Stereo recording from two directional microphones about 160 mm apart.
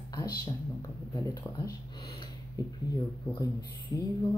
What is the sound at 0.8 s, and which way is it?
Speech, 25° left (ahead or behind).